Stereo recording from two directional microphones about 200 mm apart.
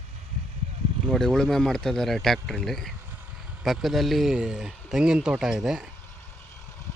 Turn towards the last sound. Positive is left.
turn(degrees=-5)  # may be behind; listen again after turning